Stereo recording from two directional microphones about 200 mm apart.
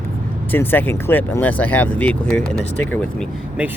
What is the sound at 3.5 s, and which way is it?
Speech, 10° right (ahead or behind).